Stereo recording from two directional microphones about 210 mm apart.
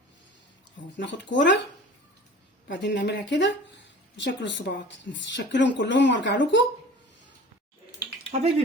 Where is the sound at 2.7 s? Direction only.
55° left (ahead or behind).